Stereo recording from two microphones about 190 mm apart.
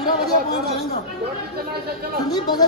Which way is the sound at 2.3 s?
20° left (ahead or behind).